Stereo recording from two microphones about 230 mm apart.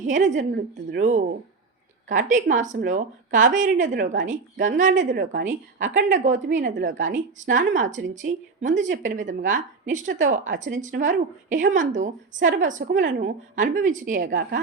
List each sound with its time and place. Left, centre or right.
0.0 s a woman's voice: right
6.7 s a woman's voice: right
7.0 s a woman's voice: right